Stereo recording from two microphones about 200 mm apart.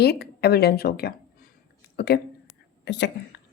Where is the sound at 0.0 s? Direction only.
55° left (ahead or behind).